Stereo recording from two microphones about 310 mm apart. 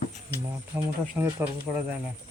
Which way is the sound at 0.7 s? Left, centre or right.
Centre.